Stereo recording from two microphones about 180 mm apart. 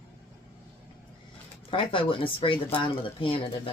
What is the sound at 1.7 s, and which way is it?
Speech, 30° left (ahead or behind).